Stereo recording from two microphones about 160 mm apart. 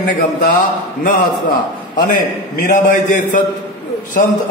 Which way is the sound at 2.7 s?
55° left (ahead or behind).